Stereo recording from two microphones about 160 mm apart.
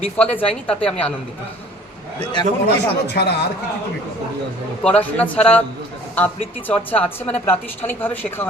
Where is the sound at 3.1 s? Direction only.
90° left.